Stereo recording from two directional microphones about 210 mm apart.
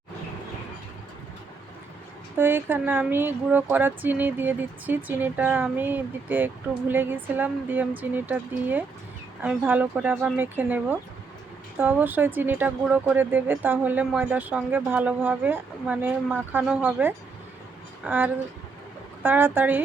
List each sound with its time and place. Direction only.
2.3 s speech: 10° right (ahead or behind)